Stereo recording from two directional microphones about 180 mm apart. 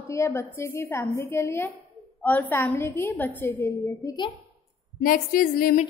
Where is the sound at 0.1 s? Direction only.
15° left (ahead or behind).